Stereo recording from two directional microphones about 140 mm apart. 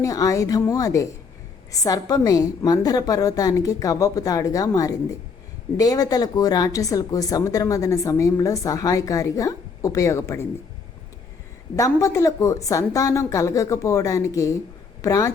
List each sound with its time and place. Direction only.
0.0 s a woman's voice: 25° left (ahead or behind)
11.8 s a woman's voice: 20° left (ahead or behind)